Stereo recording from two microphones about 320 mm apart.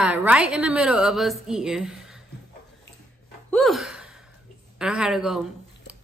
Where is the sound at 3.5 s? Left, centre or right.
Centre.